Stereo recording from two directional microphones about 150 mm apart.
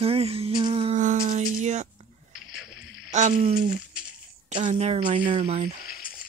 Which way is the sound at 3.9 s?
5° right (ahead or behind).